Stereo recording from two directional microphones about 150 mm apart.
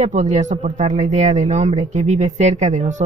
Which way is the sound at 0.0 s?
55° right (ahead or behind).